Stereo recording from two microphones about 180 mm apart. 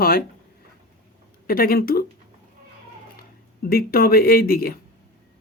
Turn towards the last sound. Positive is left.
turn(degrees=55)  # may be behind; listen again after turning